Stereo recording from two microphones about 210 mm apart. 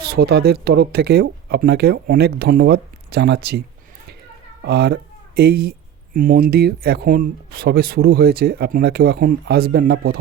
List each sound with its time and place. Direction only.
0.0 s speech: 45° right (ahead or behind)
4.6 s speech: 50° right (ahead or behind)